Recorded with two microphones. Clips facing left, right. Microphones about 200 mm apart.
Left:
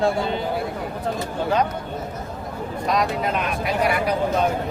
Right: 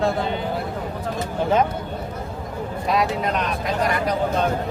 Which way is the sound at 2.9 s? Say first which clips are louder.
Right 1 dB; 5° right (ahead or behind).